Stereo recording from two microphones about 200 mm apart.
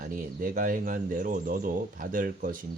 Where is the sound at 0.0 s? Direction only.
45° right (ahead or behind).